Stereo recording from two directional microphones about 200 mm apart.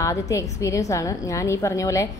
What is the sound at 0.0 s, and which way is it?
A woman's voice, 15° left (ahead or behind).